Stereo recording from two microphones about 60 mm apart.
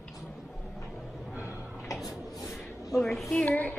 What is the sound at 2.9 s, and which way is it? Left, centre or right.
Speech, centre.